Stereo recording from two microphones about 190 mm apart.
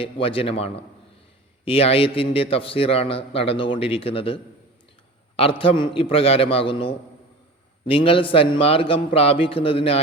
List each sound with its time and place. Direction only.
0.0 s a man's voice: 30° left (ahead or behind)
5.4 s a man's voice: 30° left (ahead or behind)